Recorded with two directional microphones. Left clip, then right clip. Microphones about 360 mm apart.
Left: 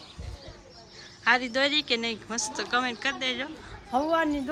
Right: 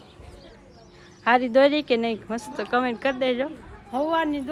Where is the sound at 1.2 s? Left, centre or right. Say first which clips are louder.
Right 6 dB; centre.